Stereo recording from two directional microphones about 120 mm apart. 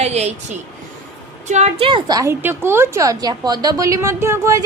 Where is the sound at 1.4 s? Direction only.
70° right (ahead or behind).